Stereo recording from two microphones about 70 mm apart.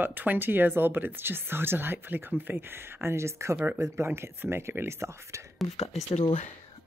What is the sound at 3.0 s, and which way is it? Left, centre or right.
Speech, right.